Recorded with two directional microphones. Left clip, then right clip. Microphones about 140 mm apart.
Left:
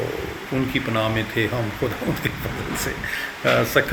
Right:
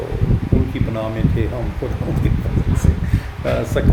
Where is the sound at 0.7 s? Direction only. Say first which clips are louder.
Left 2 dB; 10° right (ahead or behind).